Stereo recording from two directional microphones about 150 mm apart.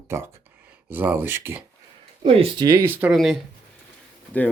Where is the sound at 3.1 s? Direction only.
Centre (ahead or behind).